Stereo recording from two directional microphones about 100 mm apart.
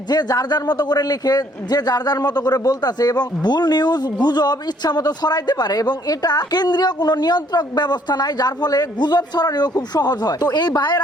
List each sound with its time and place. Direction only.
0.1 s a man's voice: 40° left (ahead or behind)